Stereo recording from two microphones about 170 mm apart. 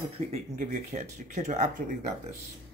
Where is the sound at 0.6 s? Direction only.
50° right (ahead or behind).